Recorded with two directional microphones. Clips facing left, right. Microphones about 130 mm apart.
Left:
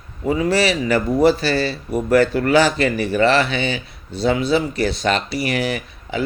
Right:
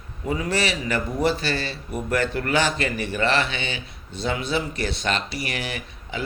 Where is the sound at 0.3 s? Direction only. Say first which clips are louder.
Left 7 dB; 35° left (ahead or behind).